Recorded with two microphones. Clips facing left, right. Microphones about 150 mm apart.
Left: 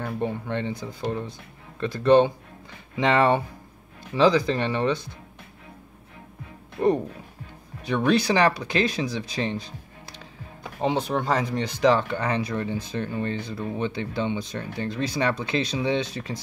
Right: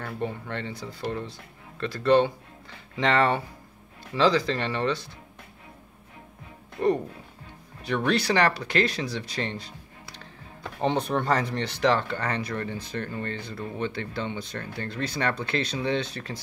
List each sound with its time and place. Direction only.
0.0 s speech: 15° left (ahead or behind)
7.8 s speech: 15° left (ahead or behind)